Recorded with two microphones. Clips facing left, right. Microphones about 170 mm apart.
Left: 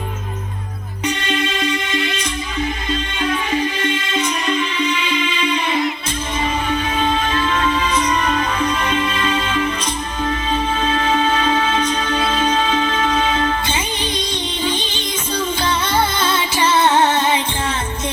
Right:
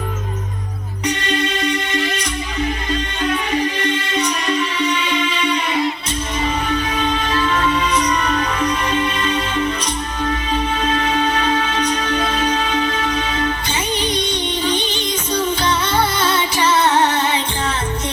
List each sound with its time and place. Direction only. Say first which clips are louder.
9.2 s music: even; 30° right (ahead or behind)
11.0 s music: left 1 dB; 40° right (ahead or behind)
13.1 s music: left 3 dB; 45° left (ahead or behind)
16.6 s music: left 1 dB; 25° left (ahead or behind)